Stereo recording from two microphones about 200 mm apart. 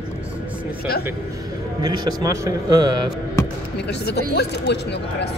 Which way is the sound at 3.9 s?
55° left (ahead or behind).